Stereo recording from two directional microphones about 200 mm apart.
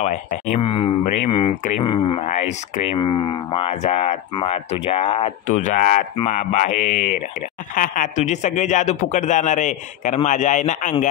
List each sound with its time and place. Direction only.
0.0 s speech: 35° left (ahead or behind)